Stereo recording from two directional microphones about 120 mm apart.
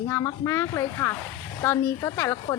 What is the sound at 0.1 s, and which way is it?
A woman's voice, 25° left (ahead or behind).